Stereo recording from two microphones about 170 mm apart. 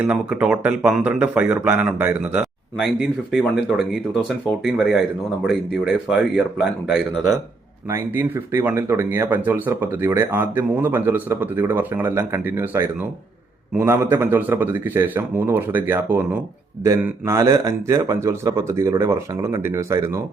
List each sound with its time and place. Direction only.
0.0 s speech: 10° right (ahead or behind)
7.9 s speech: 15° right (ahead or behind)